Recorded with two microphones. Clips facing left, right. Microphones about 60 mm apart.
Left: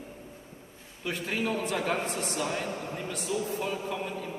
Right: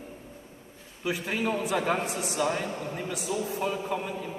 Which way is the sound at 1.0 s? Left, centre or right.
Centre.